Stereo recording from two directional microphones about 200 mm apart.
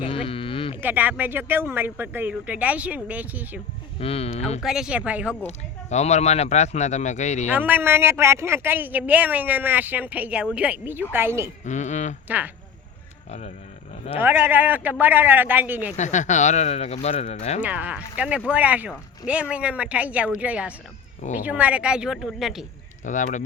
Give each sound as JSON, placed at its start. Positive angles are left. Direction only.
{"t": 0.0, "sound": "sheep", "side_deg": 25}
{"t": 0.8, "sound": "speech", "side_deg": -10}
{"t": 4.0, "sound": "speech", "side_deg": 30}
{"t": 4.6, "sound": "speech", "side_deg": 0}
{"t": 5.5, "sound": "speech", "side_deg": 35}
{"t": 7.5, "sound": "speech", "side_deg": -10}
{"t": 11.6, "sound": "speech", "side_deg": 35}
{"t": 14.2, "sound": "speech", "side_deg": -10}
{"t": 16.0, "sound": "speech", "side_deg": 35}
{"t": 17.6, "sound": "speech", "side_deg": -10}
{"t": 23.0, "sound": "speech", "side_deg": 40}